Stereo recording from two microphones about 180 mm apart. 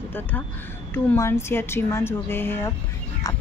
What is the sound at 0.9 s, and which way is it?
Speech, 10° left (ahead or behind).